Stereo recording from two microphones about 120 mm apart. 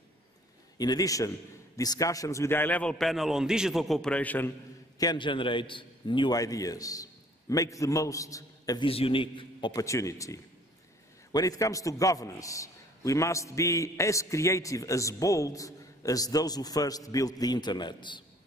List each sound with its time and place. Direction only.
0.7 s a man's voice: 30° left (ahead or behind); by 4.5 s 15° left (ahead or behind)
4.9 s a man's voice: 35° left (ahead or behind)
8.8 s a man's voice: 50° left (ahead or behind)
9.7 s a man's voice: 30° left (ahead or behind)